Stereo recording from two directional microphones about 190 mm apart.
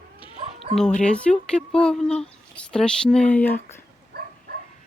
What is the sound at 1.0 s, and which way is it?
Speech, 5° left (ahead or behind).